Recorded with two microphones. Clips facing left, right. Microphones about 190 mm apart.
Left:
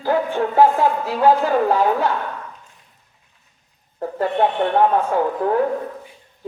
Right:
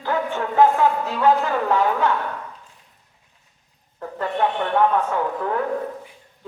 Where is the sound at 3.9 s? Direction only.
35° left (ahead or behind).